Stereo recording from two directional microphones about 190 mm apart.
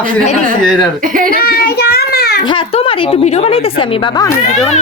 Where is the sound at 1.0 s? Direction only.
45° right (ahead or behind).